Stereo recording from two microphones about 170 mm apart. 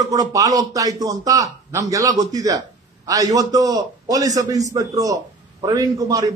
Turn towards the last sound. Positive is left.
turn(degrees=-20)  # may be behind; listen again after turning